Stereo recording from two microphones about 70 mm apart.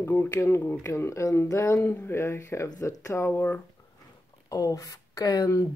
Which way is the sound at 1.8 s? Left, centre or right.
Left.